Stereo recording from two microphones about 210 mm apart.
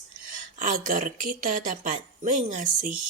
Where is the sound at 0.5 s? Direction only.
40° right (ahead or behind).